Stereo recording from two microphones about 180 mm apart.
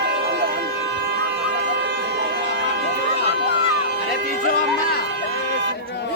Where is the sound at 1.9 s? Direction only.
65° right (ahead or behind).